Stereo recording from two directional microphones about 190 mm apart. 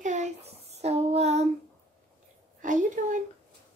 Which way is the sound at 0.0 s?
40° right (ahead or behind).